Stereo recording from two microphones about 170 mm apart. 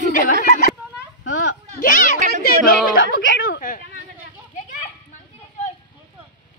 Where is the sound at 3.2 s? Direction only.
65° left (ahead or behind).